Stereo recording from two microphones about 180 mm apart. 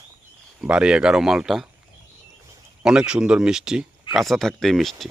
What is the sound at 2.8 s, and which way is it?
Speech, 5° right (ahead or behind).